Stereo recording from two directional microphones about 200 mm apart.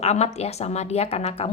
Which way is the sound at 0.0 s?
30° left (ahead or behind).